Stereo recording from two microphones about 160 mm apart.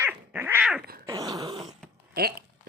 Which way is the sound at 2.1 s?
75° right (ahead or behind).